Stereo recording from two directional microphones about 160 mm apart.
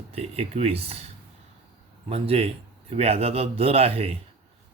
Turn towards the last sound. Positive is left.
turn(degrees=-40)  # may be behind; listen again after turning